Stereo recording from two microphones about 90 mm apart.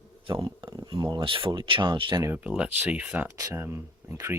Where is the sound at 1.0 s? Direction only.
50° right (ahead or behind).